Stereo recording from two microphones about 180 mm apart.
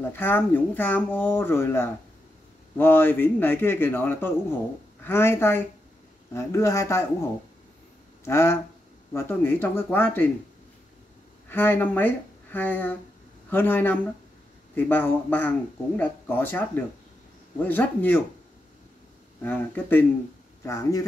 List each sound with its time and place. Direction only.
0.0 s speech: 10° left (ahead or behind)
8.3 s speech: 15° left (ahead or behind)
11.4 s speech: 10° left (ahead or behind)
19.4 s speech: 10° left (ahead or behind)